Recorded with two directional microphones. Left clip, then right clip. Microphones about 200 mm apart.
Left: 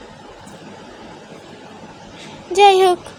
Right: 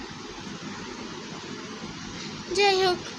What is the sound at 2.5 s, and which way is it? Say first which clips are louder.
Speech: left 11 dB; 40° left (ahead or behind).